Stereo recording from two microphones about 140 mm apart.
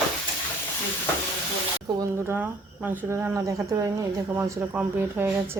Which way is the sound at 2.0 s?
20° right (ahead or behind).